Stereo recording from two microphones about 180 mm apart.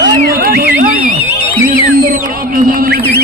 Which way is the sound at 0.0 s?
55° right (ahead or behind).